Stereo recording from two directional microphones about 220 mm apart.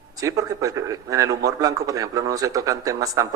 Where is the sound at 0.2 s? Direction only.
15° right (ahead or behind).